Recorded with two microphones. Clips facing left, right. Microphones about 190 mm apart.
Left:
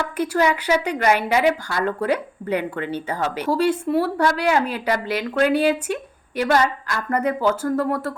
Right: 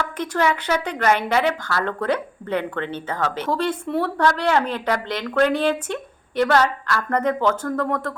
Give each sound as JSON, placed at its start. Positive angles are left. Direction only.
{"t": 0.2, "sound": "a woman's voice", "side_deg": 10}